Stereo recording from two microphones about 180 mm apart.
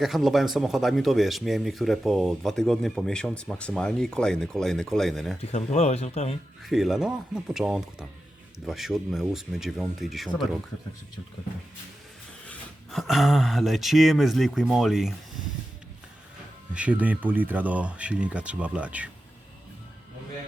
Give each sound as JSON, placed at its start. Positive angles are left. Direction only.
{"t": 0.0, "sound": "speech", "side_deg": 0}
{"t": 5.4, "sound": "speech", "side_deg": 35}
{"t": 6.7, "sound": "speech", "side_deg": 0}
{"t": 12.5, "sound": "speech", "side_deg": 0}
{"t": 16.7, "sound": "speech", "side_deg": -5}